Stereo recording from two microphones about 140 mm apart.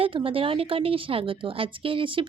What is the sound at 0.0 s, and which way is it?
A woman's voice, 40° right (ahead or behind).